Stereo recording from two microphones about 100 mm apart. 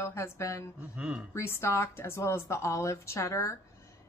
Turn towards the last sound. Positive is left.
turn(degrees=30)  # may be behind; listen again after turning